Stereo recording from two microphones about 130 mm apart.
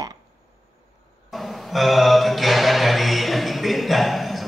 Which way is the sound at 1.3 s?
Centre (ahead or behind).